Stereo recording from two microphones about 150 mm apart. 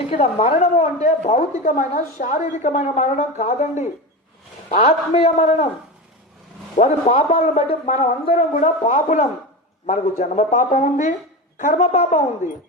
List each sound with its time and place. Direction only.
0.1 s a woman's voice: 40° left (ahead or behind)
1.6 s a woman's voice: 60° left (ahead or behind)
6.8 s a woman's voice: 50° left (ahead or behind)